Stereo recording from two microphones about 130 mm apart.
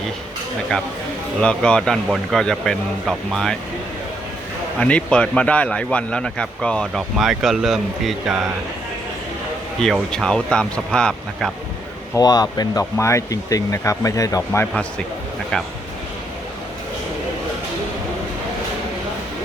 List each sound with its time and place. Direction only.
1.4 s speech: 5° left (ahead or behind)
4.8 s speech: 10° left (ahead or behind)
9.8 s speech: 5° left (ahead or behind)
12.1 s speech: 30° left (ahead or behind)
14.7 s speech: 5° left (ahead or behind)